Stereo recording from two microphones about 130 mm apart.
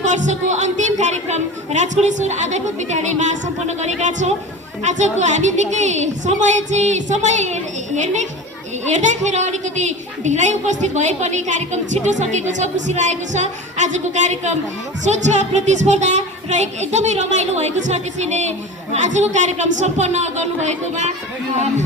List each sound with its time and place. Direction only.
0.0 s a woman's voice: 65° right (ahead or behind)